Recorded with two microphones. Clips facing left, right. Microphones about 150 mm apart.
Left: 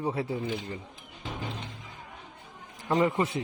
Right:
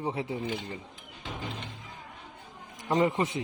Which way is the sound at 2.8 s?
20° right (ahead or behind).